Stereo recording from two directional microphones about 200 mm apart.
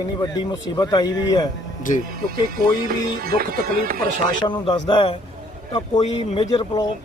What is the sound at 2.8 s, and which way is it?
Music, 50° right (ahead or behind).